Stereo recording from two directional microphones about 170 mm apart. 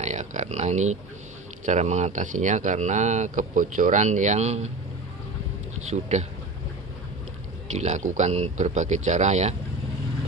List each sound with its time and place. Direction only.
0.0 s speech: 45° right (ahead or behind)
5.9 s speech: 40° right (ahead or behind)
7.7 s speech: 45° right (ahead or behind)